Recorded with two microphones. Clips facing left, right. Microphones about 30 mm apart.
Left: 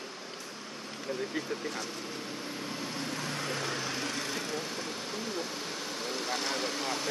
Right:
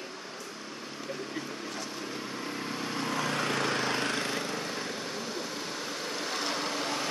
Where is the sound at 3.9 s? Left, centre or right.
Right.